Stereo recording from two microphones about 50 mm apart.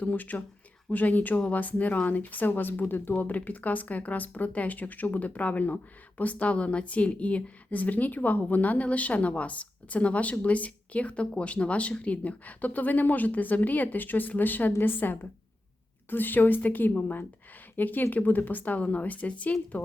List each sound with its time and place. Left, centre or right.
0.0 s speech: left